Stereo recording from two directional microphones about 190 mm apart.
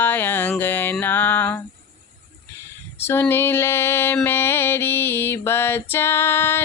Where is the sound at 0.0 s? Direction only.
10° left (ahead or behind).